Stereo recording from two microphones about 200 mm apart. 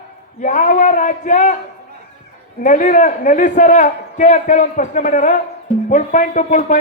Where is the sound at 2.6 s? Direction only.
40° left (ahead or behind).